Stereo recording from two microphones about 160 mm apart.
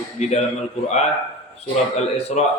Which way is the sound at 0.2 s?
45° left (ahead or behind).